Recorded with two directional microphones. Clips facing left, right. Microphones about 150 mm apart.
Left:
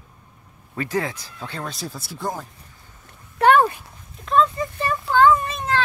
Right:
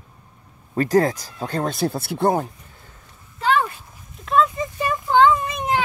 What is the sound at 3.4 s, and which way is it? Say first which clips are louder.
Dog: left 5 dB; 70° left (ahead or behind).